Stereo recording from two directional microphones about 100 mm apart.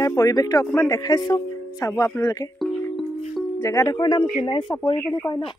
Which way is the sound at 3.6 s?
30° left (ahead or behind).